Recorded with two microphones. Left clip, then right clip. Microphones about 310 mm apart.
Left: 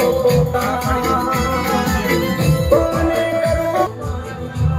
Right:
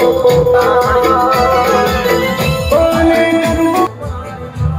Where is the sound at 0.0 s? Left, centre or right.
Centre.